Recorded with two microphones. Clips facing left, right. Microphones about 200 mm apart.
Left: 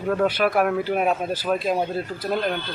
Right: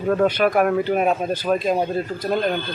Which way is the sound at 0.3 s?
5° left (ahead or behind).